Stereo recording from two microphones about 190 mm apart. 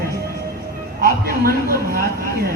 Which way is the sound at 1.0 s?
50° right (ahead or behind).